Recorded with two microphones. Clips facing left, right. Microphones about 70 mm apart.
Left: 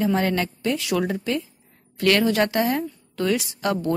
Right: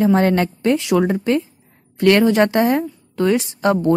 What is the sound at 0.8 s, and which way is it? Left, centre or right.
A woman's voice, right.